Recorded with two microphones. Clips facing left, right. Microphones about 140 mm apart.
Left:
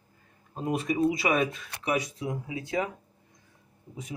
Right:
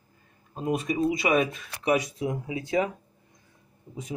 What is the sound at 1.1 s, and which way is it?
Speech, 15° right (ahead or behind).